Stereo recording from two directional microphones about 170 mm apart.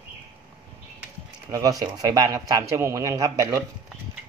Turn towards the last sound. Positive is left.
turn(degrees=-20)  # may be behind; listen again after turning